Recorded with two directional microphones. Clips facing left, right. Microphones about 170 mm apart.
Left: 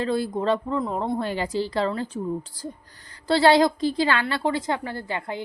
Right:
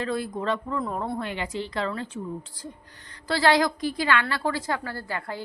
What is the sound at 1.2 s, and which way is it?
A woman's voice, 35° left (ahead or behind).